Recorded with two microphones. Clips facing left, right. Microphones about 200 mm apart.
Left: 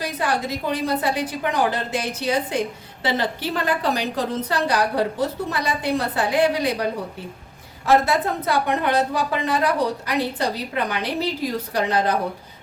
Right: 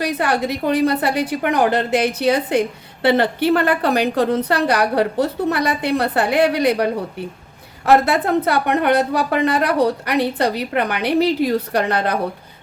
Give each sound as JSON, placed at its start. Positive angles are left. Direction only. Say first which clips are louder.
{"t": 0.0, "sound": "a woman's voice", "louder": "right 5 dB", "side_deg": -65}
{"t": 7.9, "sound": "a woman's voice", "louder": "right 4 dB", "side_deg": -65}